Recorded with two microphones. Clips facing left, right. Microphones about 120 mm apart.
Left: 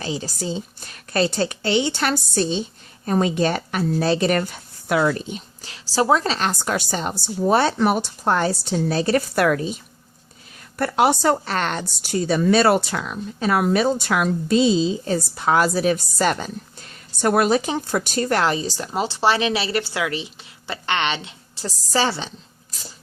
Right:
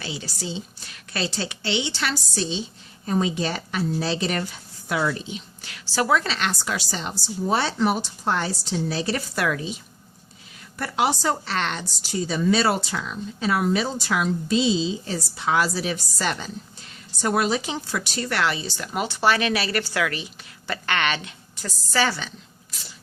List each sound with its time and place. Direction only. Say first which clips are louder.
0.0 s a woman's voice: left 6 dB; 40° left (ahead or behind)
5.6 s a woman's voice: left 4 dB; 30° left (ahead or behind); by 9.7 s 50° left (ahead or behind)
10.8 s a woman's voice: left 5 dB; 55° left (ahead or behind)
18.9 s a woman's voice: left 1 dB; 30° left (ahead or behind)